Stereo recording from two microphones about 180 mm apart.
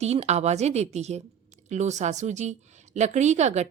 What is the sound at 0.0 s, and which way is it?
A woman's voice, 35° right (ahead or behind).